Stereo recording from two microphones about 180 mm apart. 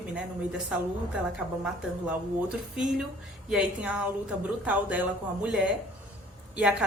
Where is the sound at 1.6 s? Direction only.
5° right (ahead or behind).